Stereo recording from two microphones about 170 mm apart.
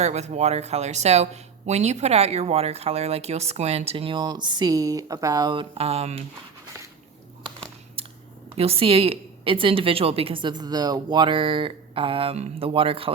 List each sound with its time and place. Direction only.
0.0 s speech: 40° right (ahead or behind)
8.0 s a sound: 35° right (ahead or behind)
8.5 s speech: 35° right (ahead or behind)